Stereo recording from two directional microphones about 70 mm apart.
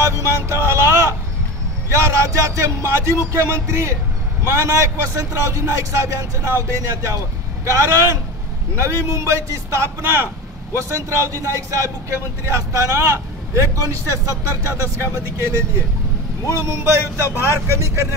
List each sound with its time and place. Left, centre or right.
0.0 s a sound: right
1.9 s speech: right
16.6 s speech: right